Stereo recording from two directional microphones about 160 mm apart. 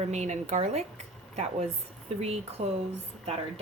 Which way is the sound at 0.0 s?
45° right (ahead or behind).